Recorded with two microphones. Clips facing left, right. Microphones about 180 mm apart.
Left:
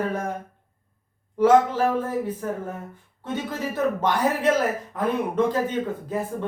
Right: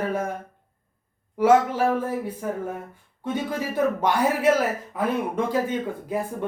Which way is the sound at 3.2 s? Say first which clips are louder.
Right 2 dB; 10° right (ahead or behind).